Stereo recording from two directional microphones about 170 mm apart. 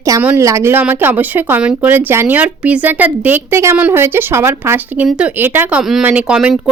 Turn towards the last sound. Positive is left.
turn(degrees=-5)  # may be behind; listen again after turning